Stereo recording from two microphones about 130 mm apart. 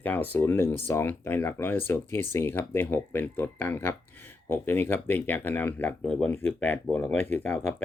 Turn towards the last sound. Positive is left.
turn(degrees=15)  # may be behind; listen again after turning